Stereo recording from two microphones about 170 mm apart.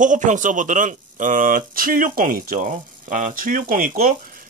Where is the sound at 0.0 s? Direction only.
50° right (ahead or behind).